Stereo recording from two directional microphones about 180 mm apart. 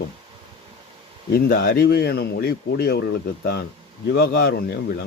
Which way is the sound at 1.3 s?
60° left (ahead or behind).